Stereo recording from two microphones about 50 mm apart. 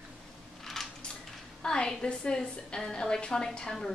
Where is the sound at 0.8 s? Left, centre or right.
Centre.